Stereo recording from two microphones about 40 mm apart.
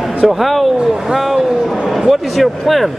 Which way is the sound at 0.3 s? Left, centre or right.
Centre.